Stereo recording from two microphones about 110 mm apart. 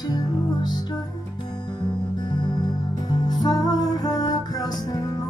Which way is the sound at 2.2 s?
40° left (ahead or behind).